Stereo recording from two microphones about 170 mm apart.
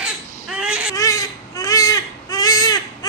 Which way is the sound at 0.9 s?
20° left (ahead or behind).